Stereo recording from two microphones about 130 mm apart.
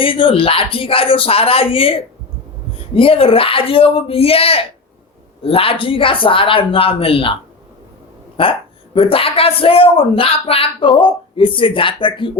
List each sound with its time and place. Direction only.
0.0 s speech: 45° left (ahead or behind)
8.4 s speech: 40° left (ahead or behind)